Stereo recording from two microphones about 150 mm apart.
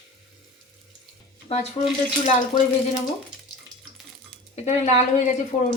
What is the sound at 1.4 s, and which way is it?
Speech, 45° left (ahead or behind).